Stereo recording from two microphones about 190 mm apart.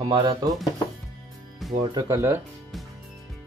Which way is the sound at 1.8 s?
20° right (ahead or behind).